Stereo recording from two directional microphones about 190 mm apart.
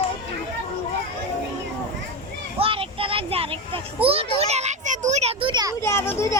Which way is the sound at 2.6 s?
30° right (ahead or behind).